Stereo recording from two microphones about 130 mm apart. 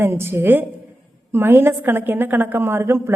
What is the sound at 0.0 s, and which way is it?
A woman's voice, 20° right (ahead or behind).